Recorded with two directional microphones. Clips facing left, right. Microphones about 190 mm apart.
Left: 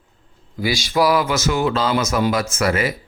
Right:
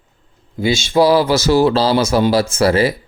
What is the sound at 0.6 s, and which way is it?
Speech, 25° right (ahead or behind).